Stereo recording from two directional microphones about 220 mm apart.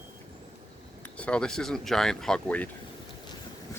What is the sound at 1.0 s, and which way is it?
Speech, 5° left (ahead or behind).